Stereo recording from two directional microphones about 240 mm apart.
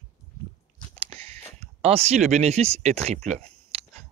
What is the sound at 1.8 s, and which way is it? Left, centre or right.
Speech, right.